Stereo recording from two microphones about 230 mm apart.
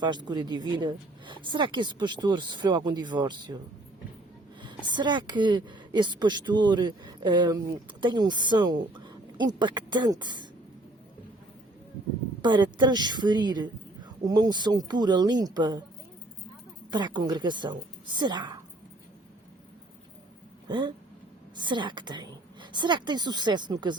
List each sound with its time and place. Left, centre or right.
0.0 s speech: centre
4.9 s speech: centre
12.4 s speech: centre
16.9 s speech: centre
20.7 s speech: centre